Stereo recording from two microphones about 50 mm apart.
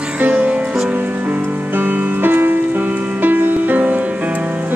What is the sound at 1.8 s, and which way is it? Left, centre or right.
Music, right.